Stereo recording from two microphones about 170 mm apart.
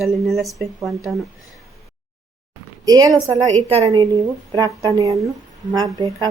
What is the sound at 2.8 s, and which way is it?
A woman's voice, 20° right (ahead or behind).